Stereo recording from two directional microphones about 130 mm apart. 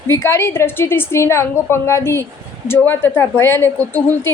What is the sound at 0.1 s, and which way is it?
A woman's voice, 20° left (ahead or behind).